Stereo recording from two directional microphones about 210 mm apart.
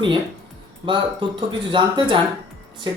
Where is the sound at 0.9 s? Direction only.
25° right (ahead or behind).